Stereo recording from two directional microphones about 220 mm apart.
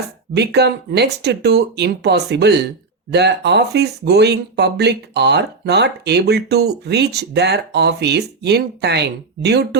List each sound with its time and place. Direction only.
0.3 s speech: 50° right (ahead or behind)